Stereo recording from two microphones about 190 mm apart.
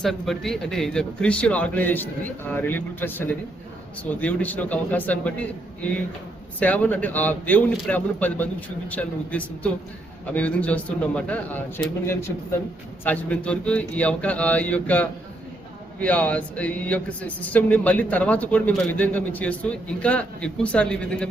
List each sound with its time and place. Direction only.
0.0 s speech: centre (ahead or behind)